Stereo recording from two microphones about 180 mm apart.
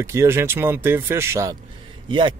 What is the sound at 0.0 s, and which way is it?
Speech, 15° right (ahead or behind).